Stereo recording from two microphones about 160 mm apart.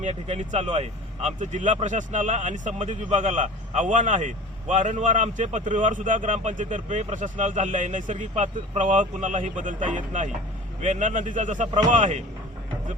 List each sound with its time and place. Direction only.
0.0 s speech: 45° right (ahead or behind)